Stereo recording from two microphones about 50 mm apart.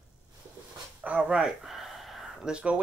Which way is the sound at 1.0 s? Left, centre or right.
Right.